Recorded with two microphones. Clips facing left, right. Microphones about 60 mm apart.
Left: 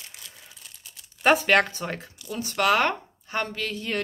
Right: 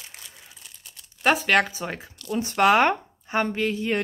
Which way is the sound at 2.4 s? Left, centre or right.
Right.